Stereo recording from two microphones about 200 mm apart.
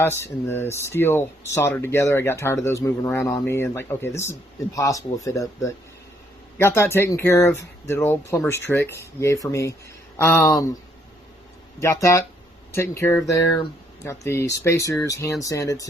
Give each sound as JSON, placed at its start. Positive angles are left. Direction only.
{"t": 0.0, "sound": "speech", "side_deg": 10}
{"t": 6.6, "sound": "speech", "side_deg": 10}
{"t": 11.8, "sound": "speech", "side_deg": 15}